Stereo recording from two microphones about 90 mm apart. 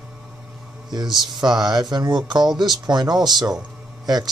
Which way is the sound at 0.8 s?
55° right (ahead or behind).